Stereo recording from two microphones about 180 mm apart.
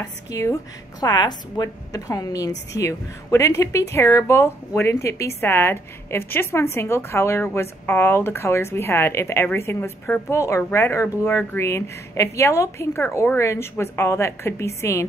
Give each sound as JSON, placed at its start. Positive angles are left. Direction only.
{"t": 0.0, "sound": "a woman's voice", "side_deg": 20}